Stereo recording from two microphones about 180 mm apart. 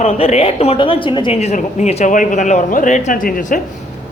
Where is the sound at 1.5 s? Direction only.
40° left (ahead or behind).